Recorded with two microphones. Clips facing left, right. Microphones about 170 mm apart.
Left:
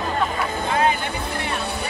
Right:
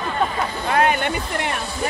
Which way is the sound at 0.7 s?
60° right (ahead or behind).